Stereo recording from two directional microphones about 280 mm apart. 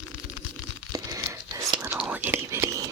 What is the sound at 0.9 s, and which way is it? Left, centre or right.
Whispering, centre.